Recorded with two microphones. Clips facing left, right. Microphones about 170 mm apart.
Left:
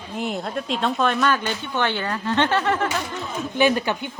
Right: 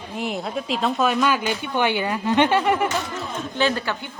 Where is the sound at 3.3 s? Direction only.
10° left (ahead or behind).